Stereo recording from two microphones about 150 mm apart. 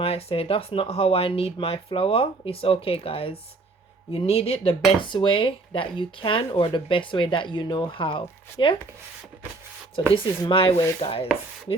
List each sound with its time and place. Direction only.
0.0 s speech: 40° left (ahead or behind)
10.0 s speech: 35° left (ahead or behind)